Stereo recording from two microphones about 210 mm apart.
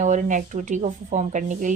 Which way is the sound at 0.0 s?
35° right (ahead or behind).